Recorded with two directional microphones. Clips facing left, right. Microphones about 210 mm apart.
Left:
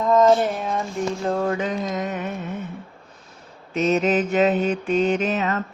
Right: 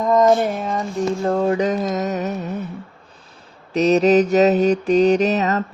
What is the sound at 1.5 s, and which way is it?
Mantra, 40° right (ahead or behind).